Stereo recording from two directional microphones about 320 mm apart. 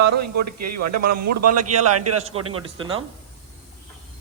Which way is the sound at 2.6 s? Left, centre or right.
Centre.